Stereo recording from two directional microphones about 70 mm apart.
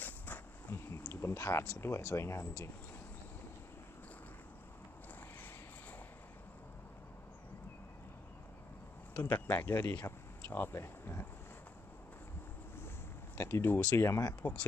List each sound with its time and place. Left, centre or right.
0.0 s a sound: left
0.7 s speech: left
9.2 s speech: left
9.7 s speech: left
13.4 s speech: left
14.4 s speech: left